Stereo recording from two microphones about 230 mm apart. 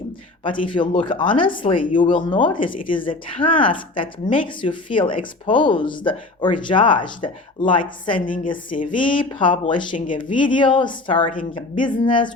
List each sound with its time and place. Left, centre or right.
0.6 s speech: left
8.2 s a woman's voice: left
8.9 s speech: left